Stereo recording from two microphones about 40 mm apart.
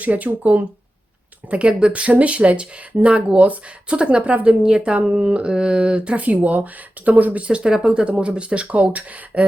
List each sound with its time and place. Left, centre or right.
0.0 s speech: right
1.5 s speech: right
7.4 s speech: right